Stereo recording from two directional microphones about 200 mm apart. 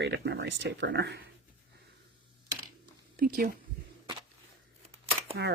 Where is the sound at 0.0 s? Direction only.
55° right (ahead or behind).